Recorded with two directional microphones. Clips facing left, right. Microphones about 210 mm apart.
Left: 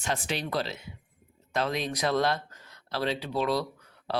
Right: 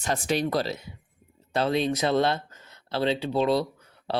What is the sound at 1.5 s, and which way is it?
Speech, 30° right (ahead or behind).